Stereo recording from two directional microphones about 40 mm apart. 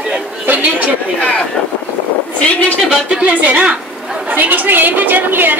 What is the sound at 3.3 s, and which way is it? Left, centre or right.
Speech, right.